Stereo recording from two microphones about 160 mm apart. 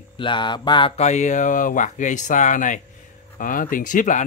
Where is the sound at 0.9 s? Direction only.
45° left (ahead or behind).